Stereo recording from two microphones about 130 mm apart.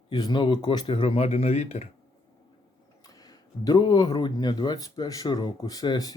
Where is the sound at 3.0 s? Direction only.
30° left (ahead or behind).